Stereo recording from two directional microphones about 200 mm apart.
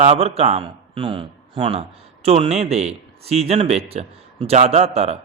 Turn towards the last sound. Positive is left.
turn(degrees=-30)  # may be behind; listen again after turning